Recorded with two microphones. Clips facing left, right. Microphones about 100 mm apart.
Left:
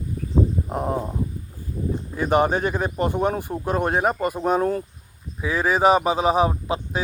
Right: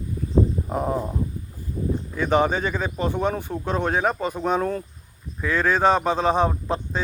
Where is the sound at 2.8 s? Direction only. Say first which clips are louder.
Left 2 dB; 55° left (ahead or behind).